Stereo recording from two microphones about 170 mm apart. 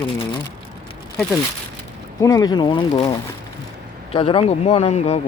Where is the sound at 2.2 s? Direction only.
20° left (ahead or behind).